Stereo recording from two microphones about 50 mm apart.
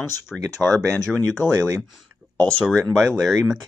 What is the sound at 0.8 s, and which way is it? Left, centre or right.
Speech, right.